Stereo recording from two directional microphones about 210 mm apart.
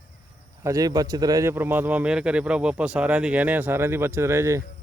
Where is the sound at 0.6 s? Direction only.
15° right (ahead or behind).